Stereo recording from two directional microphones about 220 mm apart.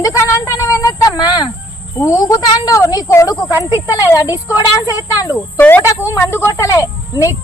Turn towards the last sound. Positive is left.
turn(degrees=15)  # may be behind; listen again after turning